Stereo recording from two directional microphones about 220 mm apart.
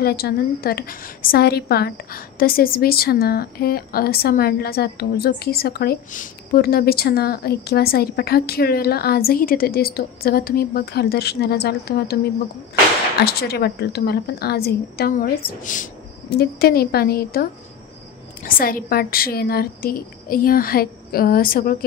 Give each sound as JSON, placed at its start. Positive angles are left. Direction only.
{"t": 0.0, "sound": "a woman's voice", "side_deg": 45}
{"t": 13.2, "sound": "a woman's voice", "side_deg": 45}